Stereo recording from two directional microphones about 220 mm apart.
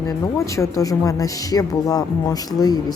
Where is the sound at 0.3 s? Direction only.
15° left (ahead or behind).